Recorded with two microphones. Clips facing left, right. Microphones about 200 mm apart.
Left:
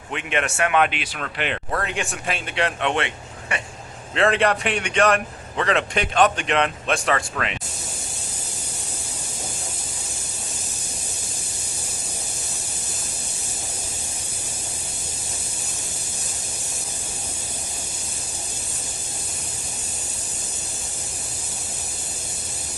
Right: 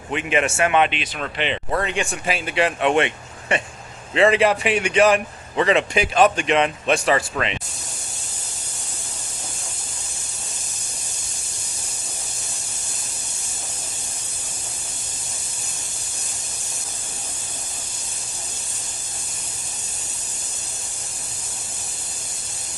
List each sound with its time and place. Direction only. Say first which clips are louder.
0.1 s a man's voice: right 4 dB; centre (ahead or behind)
3.5 s speech: right 6 dB; 25° right (ahead or behind)
4.1 s a man's voice: right 3 dB; 5° right (ahead or behind)